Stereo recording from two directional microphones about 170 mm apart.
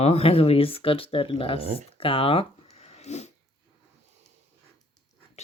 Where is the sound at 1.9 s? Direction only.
35° left (ahead or behind).